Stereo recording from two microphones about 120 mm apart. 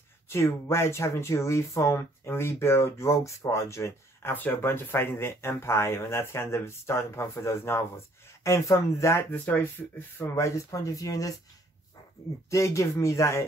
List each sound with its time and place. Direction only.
0.3 s speech: 20° left (ahead or behind)
12.4 s speech: 25° left (ahead or behind)